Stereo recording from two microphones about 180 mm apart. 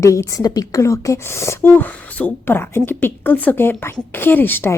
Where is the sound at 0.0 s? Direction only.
15° left (ahead or behind).